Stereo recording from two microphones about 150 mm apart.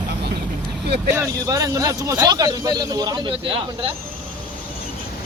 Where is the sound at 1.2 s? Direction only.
20° right (ahead or behind).